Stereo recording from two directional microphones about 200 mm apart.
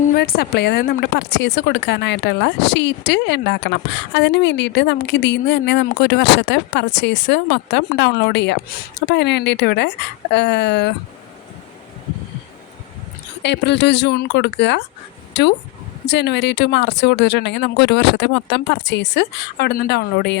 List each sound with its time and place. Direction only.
0.1 s a woman's voice: 50° left (ahead or behind)
13.4 s a woman's voice: 60° left (ahead or behind)